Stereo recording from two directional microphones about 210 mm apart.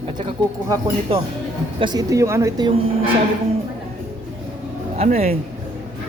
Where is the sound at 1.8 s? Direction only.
20° right (ahead or behind).